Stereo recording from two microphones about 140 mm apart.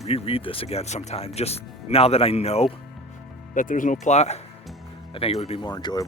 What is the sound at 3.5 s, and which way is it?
Speech, 70° left (ahead or behind).